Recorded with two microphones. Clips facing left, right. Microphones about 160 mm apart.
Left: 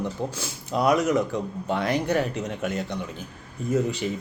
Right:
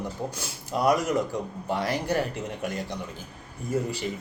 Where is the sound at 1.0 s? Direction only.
65° left (ahead or behind).